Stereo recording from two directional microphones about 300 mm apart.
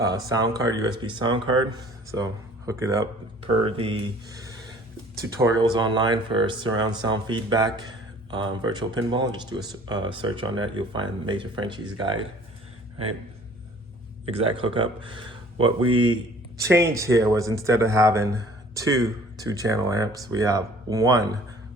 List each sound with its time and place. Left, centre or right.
0.3 s speech: centre
14.3 s speech: centre